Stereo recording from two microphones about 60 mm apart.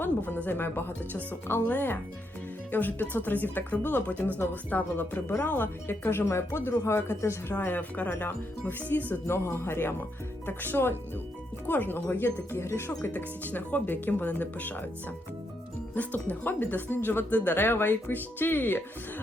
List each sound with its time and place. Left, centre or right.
0.3 s speech: left
7.6 s speech: left
9.2 s speech: left
13.1 s speech: left
16.0 s speech: left